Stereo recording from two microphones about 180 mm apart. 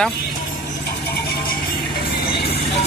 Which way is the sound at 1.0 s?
65° left (ahead or behind).